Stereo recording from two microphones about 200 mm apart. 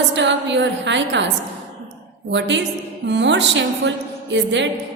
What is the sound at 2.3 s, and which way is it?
A woman's voice, 65° right (ahead or behind).